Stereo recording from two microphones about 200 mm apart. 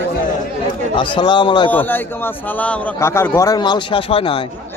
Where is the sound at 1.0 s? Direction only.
25° left (ahead or behind).